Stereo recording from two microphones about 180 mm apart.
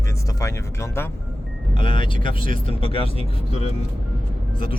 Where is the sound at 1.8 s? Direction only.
30° left (ahead or behind).